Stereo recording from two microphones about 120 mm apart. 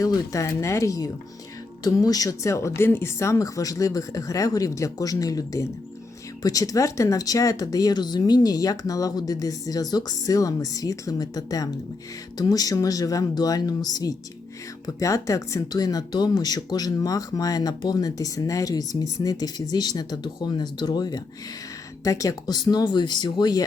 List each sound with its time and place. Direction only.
0.0 s speech: 25° left (ahead or behind)